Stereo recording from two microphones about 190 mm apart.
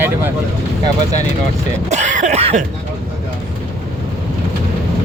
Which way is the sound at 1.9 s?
40° right (ahead or behind).